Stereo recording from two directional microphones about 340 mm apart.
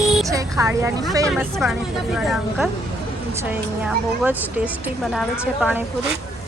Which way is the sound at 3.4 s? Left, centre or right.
Centre.